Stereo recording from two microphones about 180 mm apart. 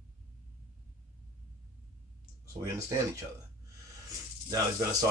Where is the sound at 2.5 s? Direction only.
15° right (ahead or behind).